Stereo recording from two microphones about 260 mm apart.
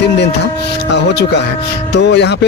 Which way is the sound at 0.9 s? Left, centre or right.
Left.